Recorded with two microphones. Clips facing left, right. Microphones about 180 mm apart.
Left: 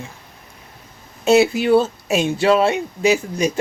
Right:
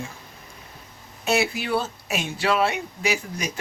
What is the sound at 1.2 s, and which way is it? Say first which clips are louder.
Speech: left 9 dB; 25° left (ahead or behind).